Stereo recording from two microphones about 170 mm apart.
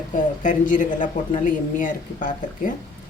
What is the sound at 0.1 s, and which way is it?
A woman's voice, 50° left (ahead or behind).